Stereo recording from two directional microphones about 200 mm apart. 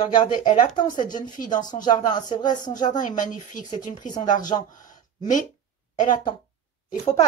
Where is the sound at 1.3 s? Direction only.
40° left (ahead or behind).